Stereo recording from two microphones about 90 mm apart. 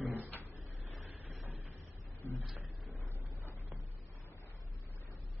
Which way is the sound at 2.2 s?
25° left (ahead or behind).